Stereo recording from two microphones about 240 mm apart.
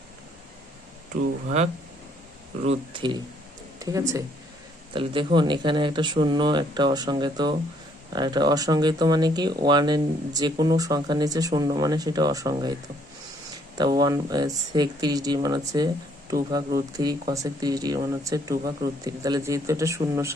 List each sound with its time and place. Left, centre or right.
1.1 s speech: right
2.6 s speech: centre
13.7 s speech: centre